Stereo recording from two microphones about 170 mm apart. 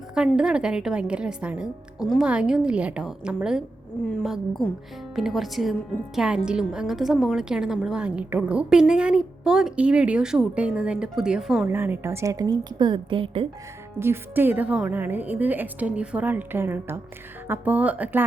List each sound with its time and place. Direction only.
0.3 s a woman's voice: 5° right (ahead or behind)
11.7 s a woman's voice: 15° right (ahead or behind); by 13.5 s 30° right (ahead or behind)
14.0 s a woman's voice: 15° right (ahead or behind)